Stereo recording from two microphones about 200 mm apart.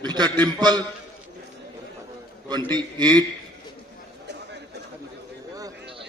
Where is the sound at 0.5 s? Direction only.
20° right (ahead or behind).